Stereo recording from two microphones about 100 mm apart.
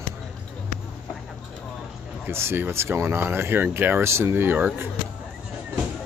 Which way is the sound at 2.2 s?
25° right (ahead or behind).